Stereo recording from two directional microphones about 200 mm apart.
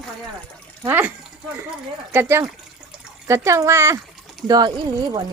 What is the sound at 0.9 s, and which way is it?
Speech, 10° right (ahead or behind).